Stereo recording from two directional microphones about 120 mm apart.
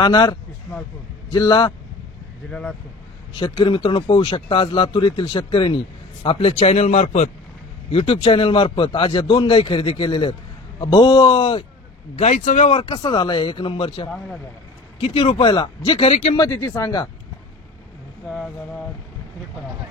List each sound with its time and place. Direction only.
0.0 s speech: 40° left (ahead or behind)
3.3 s speech: 45° left (ahead or behind)
6.2 s speech: 55° left (ahead or behind); by 7.2 s 70° left (ahead or behind)
7.9 s speech: 50° left (ahead or behind)
12.2 s speech: 75° left (ahead or behind)
12.8 s speech: 40° left (ahead or behind)
16.3 s speech: 25° left (ahead or behind)